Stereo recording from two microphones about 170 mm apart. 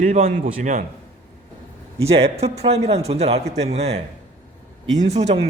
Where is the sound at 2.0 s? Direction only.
35° right (ahead or behind).